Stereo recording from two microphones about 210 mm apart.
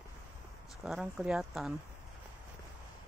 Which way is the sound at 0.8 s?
Centre (ahead or behind).